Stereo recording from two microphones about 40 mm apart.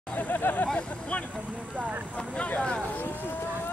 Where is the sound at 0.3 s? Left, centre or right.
Left.